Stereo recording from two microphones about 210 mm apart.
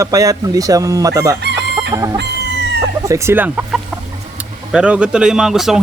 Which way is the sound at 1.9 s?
15° right (ahead or behind).